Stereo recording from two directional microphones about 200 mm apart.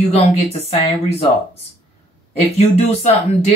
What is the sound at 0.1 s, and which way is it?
Speech, 30° left (ahead or behind).